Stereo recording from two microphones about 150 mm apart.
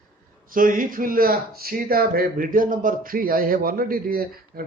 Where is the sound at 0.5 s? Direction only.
65° right (ahead or behind).